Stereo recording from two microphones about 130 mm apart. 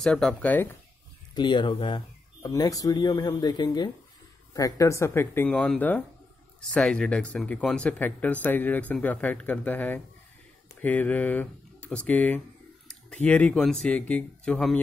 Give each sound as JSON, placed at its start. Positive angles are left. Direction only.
{"t": 0.0, "sound": "speech", "side_deg": 5}
{"t": 1.3, "sound": "speech", "side_deg": 35}